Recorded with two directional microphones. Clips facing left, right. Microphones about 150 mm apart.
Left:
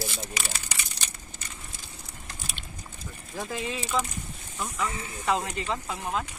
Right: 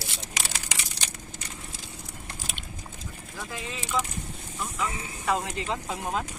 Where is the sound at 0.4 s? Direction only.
90° right.